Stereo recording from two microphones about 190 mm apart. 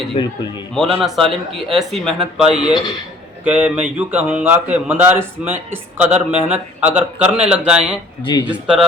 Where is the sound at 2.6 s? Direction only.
25° left (ahead or behind).